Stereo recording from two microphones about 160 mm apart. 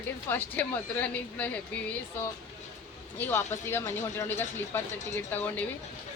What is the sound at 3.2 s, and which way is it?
Speech, 15° left (ahead or behind).